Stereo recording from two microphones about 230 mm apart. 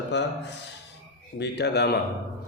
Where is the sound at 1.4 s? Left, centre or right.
Left.